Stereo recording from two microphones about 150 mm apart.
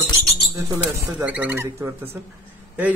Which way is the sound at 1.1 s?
10° right (ahead or behind).